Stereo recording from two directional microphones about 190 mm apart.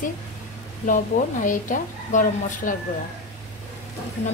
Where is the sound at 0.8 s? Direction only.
45° left (ahead or behind).